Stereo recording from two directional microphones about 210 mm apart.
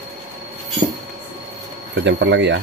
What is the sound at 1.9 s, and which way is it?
Speech, 55° right (ahead or behind).